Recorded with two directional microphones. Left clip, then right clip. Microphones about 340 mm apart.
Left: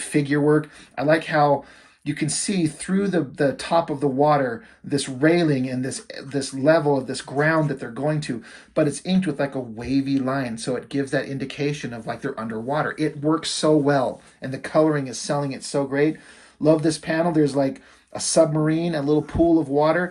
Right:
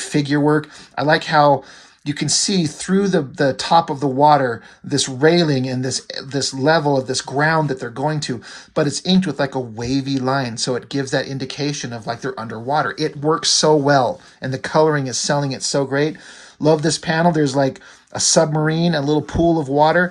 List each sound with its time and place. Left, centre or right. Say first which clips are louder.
0.0 s speech: right 3 dB; centre